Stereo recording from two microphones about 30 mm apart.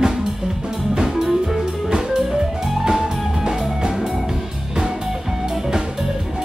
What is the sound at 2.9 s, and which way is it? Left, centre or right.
Music, right.